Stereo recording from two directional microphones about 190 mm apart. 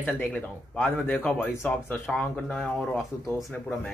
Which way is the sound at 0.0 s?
10° left (ahead or behind).